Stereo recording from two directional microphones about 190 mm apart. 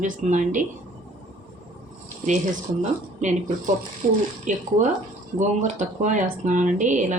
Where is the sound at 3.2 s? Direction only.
40° right (ahead or behind).